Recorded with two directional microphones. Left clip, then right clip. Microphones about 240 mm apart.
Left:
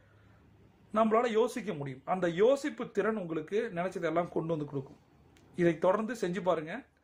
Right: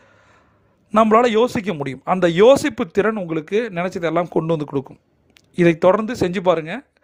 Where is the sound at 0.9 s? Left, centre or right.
Right.